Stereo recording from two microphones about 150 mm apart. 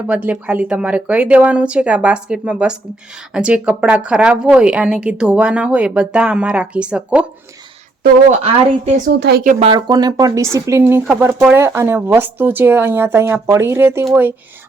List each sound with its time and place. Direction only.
0.1 s a woman's voice: 10° right (ahead or behind)
9.0 s a woman's voice: 90° right
9.7 s a woman's voice: 25° right (ahead or behind)